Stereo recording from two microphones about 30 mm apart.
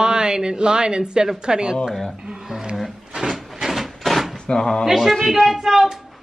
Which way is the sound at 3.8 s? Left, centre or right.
Centre.